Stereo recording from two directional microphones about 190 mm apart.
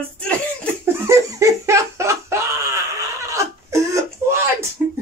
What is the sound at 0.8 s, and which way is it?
Laughter, 15° right (ahead or behind).